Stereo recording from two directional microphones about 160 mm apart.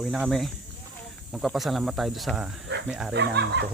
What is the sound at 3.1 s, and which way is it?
Speech, 90° right.